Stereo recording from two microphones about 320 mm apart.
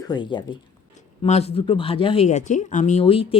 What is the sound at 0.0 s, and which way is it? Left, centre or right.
Speech, centre.